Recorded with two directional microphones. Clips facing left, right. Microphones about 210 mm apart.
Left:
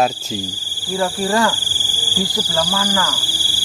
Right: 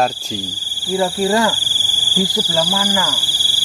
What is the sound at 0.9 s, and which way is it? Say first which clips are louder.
Speech: right 2 dB; 20° right (ahead or behind).